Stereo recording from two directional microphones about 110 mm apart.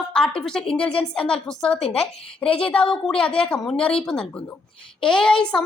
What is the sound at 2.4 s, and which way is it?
Speech, 55° left (ahead or behind).